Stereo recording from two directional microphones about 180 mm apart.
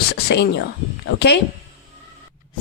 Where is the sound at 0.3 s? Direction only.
65° left (ahead or behind).